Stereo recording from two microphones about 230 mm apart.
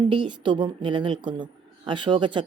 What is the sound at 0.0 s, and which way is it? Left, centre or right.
Speech, right.